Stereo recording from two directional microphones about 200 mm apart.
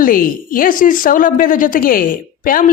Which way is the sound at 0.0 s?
45° left (ahead or behind).